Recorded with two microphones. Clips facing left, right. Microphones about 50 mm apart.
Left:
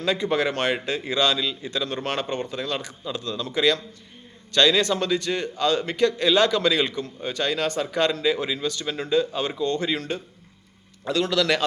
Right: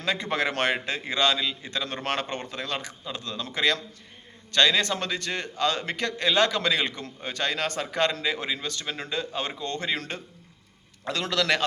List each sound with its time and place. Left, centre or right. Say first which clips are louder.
0.0 s a man's voice: left 4 dB; right
0.3 s a man's voice: left 1 dB; right
1.0 s a man's voice: left 2 dB; right
6.9 s speech: left 5 dB; right
11.0 s a man's voice: left 4 dB; right